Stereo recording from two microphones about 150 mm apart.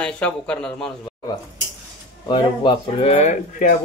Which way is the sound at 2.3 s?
35° left (ahead or behind).